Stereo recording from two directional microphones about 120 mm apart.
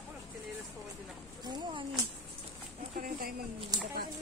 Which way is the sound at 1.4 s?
35° right (ahead or behind).